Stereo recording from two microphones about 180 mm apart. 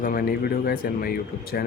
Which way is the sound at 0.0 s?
55° left (ahead or behind).